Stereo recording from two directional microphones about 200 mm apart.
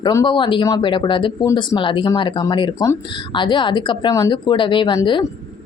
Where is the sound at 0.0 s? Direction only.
20° left (ahead or behind).